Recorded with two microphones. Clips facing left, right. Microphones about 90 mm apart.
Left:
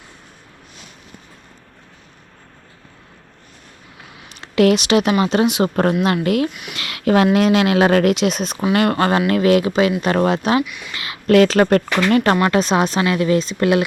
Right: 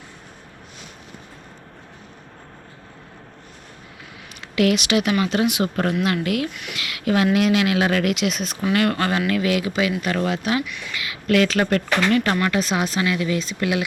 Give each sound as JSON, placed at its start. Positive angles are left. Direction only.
{"t": 4.4, "sound": "speech", "side_deg": 35}
{"t": 5.6, "sound": "speech", "side_deg": 40}
{"t": 5.9, "sound": "speech", "side_deg": 30}
{"t": 6.5, "sound": "speech", "side_deg": 15}
{"t": 6.7, "sound": "speech", "side_deg": 35}
{"t": 10.6, "sound": "speech", "side_deg": 15}
{"t": 10.9, "sound": "speech", "side_deg": 30}